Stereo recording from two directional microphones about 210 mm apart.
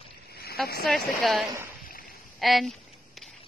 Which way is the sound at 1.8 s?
45° left (ahead or behind).